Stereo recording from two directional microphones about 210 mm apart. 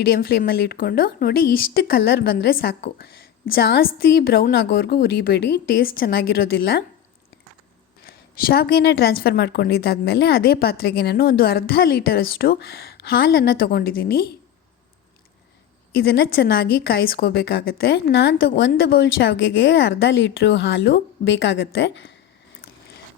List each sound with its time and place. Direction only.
0.2 s speech: 45° left (ahead or behind)
8.0 s speech: 45° left (ahead or behind)
16.0 s a woman's voice: 50° left (ahead or behind)